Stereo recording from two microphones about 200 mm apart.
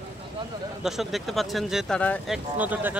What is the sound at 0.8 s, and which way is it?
Speech, centre (ahead or behind).